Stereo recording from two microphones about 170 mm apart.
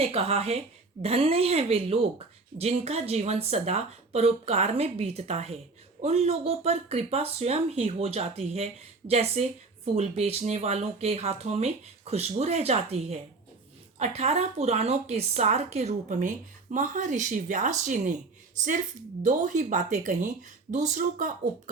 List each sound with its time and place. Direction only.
0.0 s speech: 35° right (ahead or behind)